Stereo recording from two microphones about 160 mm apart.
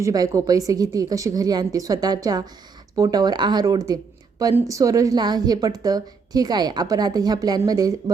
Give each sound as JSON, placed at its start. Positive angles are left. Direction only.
{"t": 0.0, "sound": "a woman's voice", "side_deg": -20}